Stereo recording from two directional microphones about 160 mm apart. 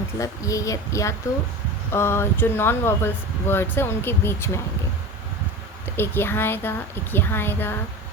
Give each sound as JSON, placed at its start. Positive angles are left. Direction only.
{"t": 0.2, "sound": "a woman's voice", "side_deg": 20}
{"t": 6.0, "sound": "speech", "side_deg": 15}